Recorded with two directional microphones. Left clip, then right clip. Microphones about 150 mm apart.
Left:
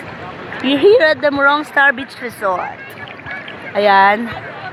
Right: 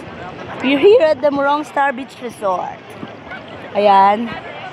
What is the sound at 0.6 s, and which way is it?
Speech, 10° left (ahead or behind).